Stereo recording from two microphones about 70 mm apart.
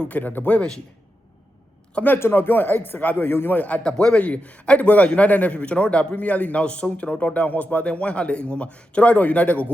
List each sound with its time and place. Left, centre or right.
0.0 s a man's voice: left
2.1 s a man's voice: left
3.8 s a man's voice: centre